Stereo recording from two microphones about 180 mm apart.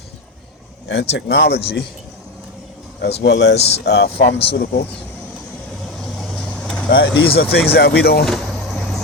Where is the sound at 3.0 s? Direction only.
70° left (ahead or behind).